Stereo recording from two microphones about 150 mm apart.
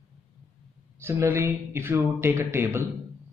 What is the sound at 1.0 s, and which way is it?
A man's voice, 15° right (ahead or behind).